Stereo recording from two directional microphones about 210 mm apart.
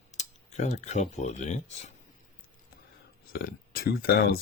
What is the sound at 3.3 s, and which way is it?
Speech, 45° left (ahead or behind).